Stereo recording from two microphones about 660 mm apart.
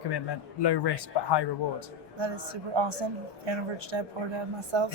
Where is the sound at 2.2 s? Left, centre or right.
Right.